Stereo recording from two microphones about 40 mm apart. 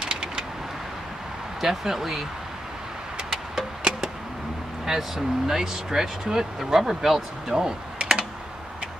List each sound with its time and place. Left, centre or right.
0.0 s vehicle: centre
1.6 s speech: centre
3.3 s music: centre
4.8 s speech: centre